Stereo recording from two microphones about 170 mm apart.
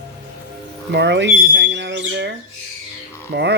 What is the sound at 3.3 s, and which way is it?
Speech, 80° right.